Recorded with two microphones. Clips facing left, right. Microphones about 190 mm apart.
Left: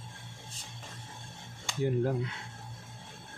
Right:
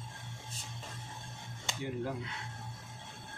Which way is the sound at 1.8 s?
45° left (ahead or behind).